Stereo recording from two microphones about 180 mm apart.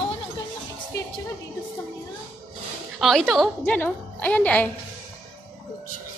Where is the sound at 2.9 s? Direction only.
Centre (ahead or behind).